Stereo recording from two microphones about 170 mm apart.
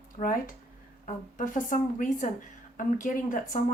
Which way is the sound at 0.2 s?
55° left (ahead or behind).